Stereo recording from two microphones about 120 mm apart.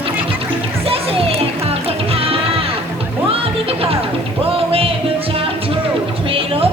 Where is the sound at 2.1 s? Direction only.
55° right (ahead or behind).